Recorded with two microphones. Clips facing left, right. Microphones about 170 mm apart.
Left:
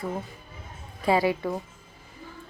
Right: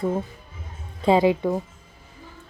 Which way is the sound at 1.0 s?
20° right (ahead or behind).